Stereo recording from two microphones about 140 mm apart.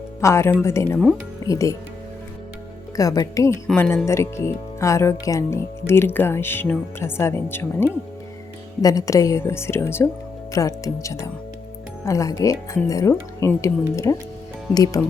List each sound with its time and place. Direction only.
0.2 s speech: 20° left (ahead or behind)
2.9 s speech: 25° left (ahead or behind)